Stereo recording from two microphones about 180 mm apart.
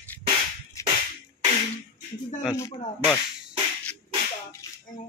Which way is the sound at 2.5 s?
15° left (ahead or behind).